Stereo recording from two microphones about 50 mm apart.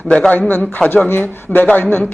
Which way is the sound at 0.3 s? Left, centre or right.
Left.